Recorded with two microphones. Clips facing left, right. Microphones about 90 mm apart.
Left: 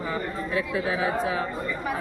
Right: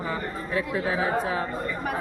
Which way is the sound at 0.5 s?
40° right (ahead or behind).